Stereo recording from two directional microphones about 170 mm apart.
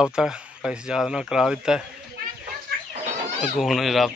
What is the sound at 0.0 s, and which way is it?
Speech, 5° right (ahead or behind).